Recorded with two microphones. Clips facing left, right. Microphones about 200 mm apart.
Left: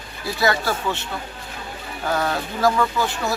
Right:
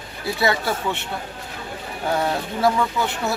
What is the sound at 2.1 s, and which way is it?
Speech, 25° right (ahead or behind).